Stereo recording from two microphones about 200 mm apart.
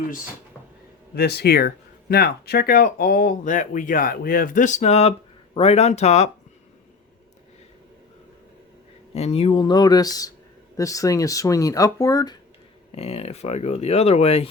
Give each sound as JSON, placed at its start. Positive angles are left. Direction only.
{"t": 1.1, "sound": "speech", "side_deg": 55}
{"t": 9.1, "sound": "speech", "side_deg": 30}
{"t": 13.0, "sound": "speech", "side_deg": 30}